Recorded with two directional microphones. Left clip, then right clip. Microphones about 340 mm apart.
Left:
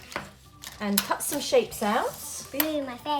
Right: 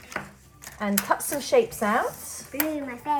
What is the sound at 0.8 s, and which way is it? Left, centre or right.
Speech, centre.